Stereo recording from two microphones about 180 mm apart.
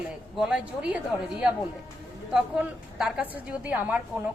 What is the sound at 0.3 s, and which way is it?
Speech, 5° right (ahead or behind).